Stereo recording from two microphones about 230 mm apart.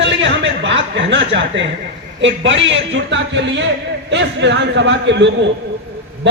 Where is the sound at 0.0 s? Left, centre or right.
Right.